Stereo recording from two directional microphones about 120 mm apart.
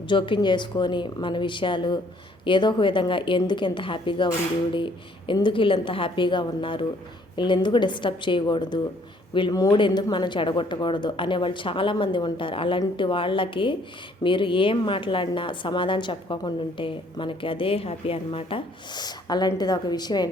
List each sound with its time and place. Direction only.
0.1 s a woman's voice: 40° left (ahead or behind)